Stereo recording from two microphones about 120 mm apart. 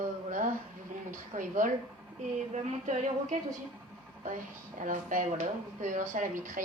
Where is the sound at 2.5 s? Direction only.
75° right (ahead or behind).